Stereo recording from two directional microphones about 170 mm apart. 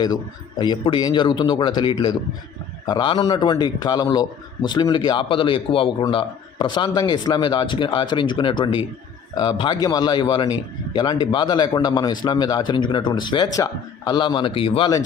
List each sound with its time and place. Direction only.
0.6 s a man's voice: 25° left (ahead or behind)